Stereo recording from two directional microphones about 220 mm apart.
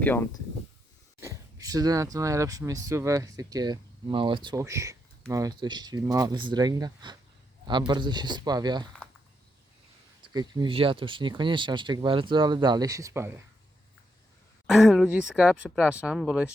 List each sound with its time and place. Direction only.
0.0 s speech: 10° left (ahead or behind)
1.2 s speech: 15° right (ahead or behind)
10.2 s speech: 20° right (ahead or behind)
14.7 s speech: centre (ahead or behind)